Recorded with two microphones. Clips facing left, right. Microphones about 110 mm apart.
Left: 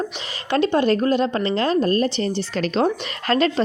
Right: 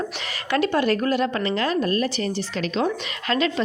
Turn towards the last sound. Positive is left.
turn(degrees=40)  # may be behind; listen again after turning